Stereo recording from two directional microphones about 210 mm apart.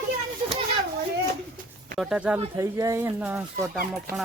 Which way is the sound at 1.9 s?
Centre (ahead or behind).